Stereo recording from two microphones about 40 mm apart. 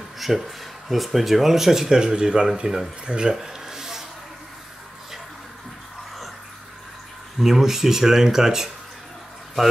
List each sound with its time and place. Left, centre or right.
0.2 s speech: centre; by 3.3 s right
3.3 s a sound: centre
7.3 s speech: centre